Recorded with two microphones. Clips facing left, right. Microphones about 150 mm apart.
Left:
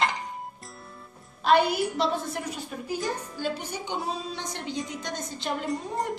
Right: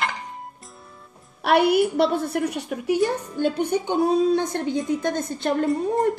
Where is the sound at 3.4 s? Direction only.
55° right (ahead or behind).